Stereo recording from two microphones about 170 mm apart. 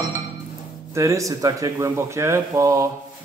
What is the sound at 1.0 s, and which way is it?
Speech, 20° right (ahead or behind).